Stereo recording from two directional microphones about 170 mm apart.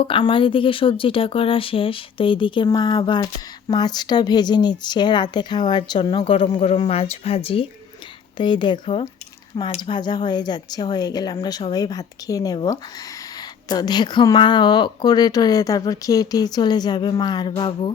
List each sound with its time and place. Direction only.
0.0 s speech: 30° left (ahead or behind)